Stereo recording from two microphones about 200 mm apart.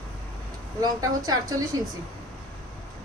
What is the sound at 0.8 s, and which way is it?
Speech, 20° right (ahead or behind).